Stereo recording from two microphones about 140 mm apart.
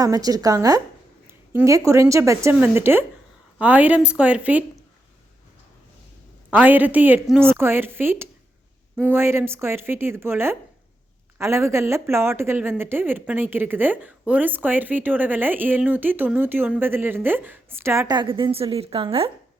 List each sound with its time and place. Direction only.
0.0 s speech: 25° right (ahead or behind); by 4.6 s 10° right (ahead or behind)
6.5 s speech: 10° right (ahead or behind)
18.1 s a woman's voice: 35° right (ahead or behind)